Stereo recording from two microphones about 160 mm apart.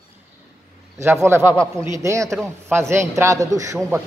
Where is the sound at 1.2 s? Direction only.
15° right (ahead or behind).